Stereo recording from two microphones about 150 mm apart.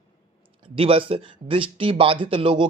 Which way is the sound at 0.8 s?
40° right (ahead or behind).